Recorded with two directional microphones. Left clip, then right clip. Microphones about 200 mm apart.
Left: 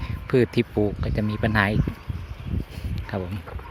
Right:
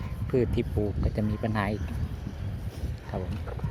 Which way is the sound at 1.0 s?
10° left (ahead or behind).